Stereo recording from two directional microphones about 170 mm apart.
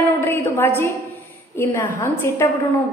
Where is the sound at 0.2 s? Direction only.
10° left (ahead or behind).